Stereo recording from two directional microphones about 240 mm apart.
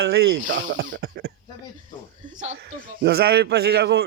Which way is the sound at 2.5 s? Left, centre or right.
Right.